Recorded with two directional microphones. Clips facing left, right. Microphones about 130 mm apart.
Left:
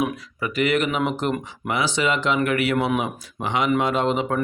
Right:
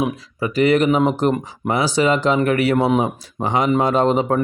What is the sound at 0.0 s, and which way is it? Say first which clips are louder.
A man's voice: right 3 dB; 30° right (ahead or behind).